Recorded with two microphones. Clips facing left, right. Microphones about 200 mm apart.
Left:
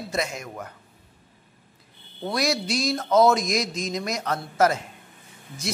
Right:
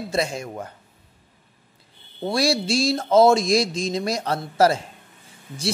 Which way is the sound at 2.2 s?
30° right (ahead or behind).